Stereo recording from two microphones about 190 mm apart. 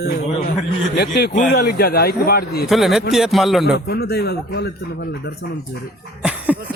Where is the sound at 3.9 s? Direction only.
60° left (ahead or behind).